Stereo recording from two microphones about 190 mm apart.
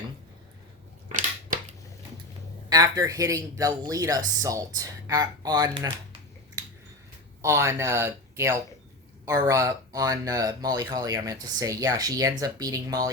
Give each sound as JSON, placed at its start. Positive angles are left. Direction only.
{"t": 2.6, "sound": "speech", "side_deg": -20}
{"t": 7.4, "sound": "speech", "side_deg": -15}